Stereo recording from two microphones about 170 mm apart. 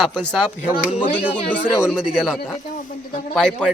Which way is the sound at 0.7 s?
55° left (ahead or behind).